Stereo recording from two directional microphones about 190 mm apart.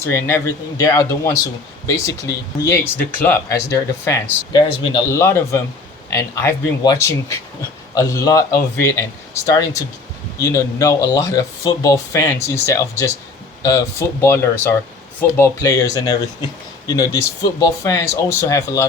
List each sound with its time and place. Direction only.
0.0 s speech: 15° left (ahead or behind)